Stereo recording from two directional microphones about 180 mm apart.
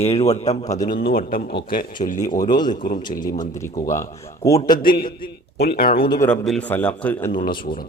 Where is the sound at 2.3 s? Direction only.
25° left (ahead or behind).